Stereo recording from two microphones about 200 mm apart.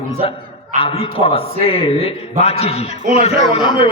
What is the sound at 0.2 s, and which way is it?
A man's voice, 25° left (ahead or behind).